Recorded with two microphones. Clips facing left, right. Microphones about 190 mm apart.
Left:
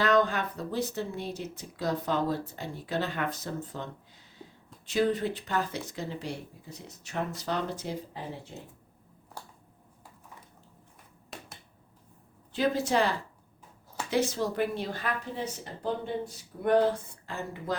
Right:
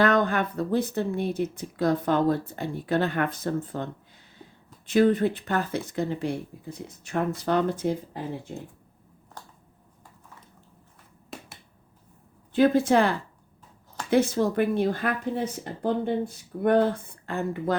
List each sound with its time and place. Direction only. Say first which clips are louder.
0.0 s speech: right 3 dB; 55° right (ahead or behind)
4.9 s speech: right 7 dB; 55° right (ahead or behind)
11.3 s finger snapping: right 4 dB; centre (ahead or behind)
12.5 s speech: right 7 dB; 55° right (ahead or behind)